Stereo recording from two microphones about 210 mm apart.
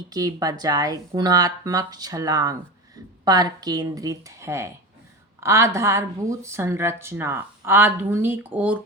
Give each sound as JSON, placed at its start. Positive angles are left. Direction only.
{"t": 0.1, "sound": "a woman's voice", "side_deg": -20}